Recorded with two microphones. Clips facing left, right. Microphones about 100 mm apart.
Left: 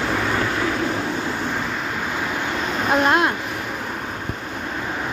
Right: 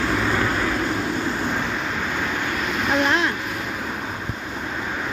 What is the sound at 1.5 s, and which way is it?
Vehicle, centre (ahead or behind).